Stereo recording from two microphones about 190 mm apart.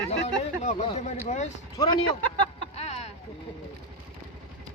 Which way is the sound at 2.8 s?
35° left (ahead or behind).